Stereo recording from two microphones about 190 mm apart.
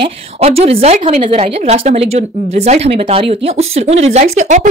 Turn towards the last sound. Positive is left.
turn(degrees=-40)  # may be behind; listen again after turning